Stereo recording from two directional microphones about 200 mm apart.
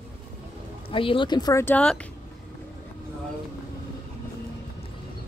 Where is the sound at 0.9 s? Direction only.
25° left (ahead or behind); by 2.0 s 10° left (ahead or behind).